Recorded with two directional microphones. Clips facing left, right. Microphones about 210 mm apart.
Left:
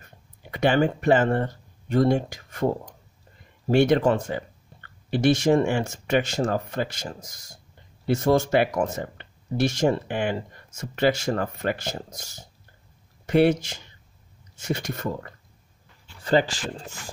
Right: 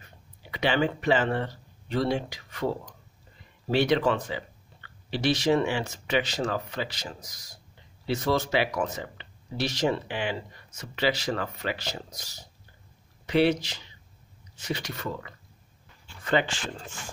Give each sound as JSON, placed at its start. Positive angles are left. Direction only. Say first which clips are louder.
{"t": 0.0, "sound": "speech", "louder": "left 2 dB", "side_deg": 50}